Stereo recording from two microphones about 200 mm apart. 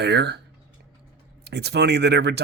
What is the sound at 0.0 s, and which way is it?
Speech, 55° right (ahead or behind).